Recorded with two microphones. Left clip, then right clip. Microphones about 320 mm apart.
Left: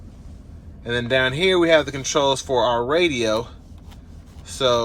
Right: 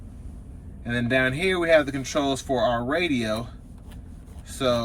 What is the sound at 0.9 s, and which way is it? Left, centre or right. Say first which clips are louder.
Speech: left 3 dB; centre.